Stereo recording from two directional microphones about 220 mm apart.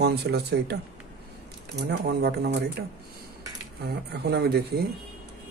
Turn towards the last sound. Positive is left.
turn(degrees=-45)  # may be behind; listen again after turning